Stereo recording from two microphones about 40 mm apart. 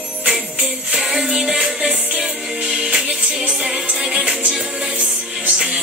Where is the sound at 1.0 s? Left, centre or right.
Centre.